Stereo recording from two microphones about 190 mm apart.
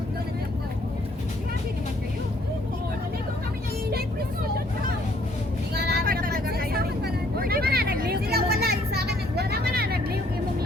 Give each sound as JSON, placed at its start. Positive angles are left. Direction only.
{"t": 5.7, "sound": "vehicle", "side_deg": -55}